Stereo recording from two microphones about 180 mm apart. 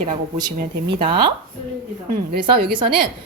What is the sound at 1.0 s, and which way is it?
Speech, 25° right (ahead or behind).